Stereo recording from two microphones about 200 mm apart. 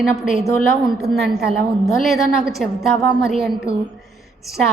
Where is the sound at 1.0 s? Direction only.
55° right (ahead or behind).